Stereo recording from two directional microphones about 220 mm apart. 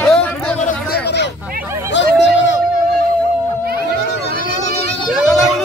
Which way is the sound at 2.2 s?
55° left (ahead or behind).